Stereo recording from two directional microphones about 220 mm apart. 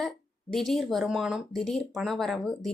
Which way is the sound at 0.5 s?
Centre (ahead or behind).